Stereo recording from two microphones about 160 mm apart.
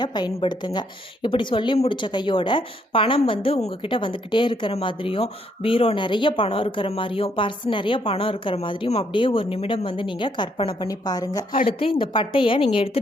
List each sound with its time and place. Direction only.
0.0 s a woman's voice: 25° left (ahead or behind)
11.8 s speech: 35° left (ahead or behind)